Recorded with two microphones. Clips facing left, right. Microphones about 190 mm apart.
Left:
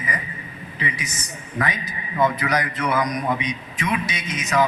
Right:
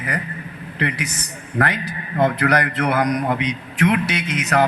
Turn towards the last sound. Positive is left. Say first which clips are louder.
# right 3 dB
turn(degrees=-65)  # may be behind; listen again after turning